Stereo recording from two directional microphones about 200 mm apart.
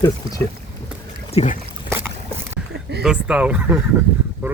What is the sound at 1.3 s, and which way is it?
Speech, 35° left (ahead or behind).